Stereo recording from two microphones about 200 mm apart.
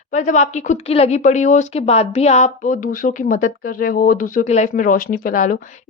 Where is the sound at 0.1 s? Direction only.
35° left (ahead or behind).